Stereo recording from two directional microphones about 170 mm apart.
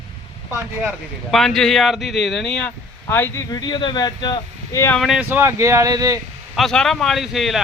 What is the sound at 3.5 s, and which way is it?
Speech, 25° left (ahead or behind).